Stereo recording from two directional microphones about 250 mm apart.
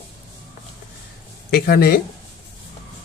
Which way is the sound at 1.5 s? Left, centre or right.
Left.